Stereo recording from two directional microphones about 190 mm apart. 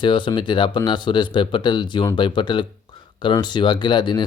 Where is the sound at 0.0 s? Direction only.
25° left (ahead or behind).